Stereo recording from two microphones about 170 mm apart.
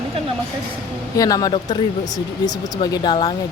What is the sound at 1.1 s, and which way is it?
Speech, 20° left (ahead or behind).